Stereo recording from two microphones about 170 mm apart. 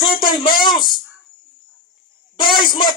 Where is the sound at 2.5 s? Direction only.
25° left (ahead or behind).